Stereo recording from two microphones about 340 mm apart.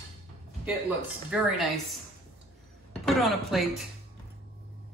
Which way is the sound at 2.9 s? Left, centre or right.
Centre.